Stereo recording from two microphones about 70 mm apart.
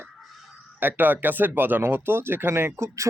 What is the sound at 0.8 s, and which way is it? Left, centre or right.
Speech, right.